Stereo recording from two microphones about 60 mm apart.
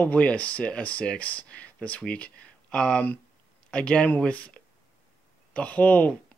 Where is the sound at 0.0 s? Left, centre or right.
Left.